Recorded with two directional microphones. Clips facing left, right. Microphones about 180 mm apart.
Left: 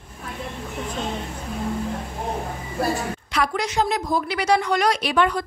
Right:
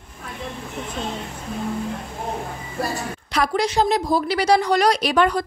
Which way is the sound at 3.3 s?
35° right (ahead or behind).